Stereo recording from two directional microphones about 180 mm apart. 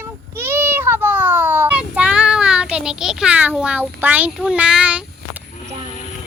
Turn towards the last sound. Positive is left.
turn(degrees=-5)  # may be behind; listen again after turning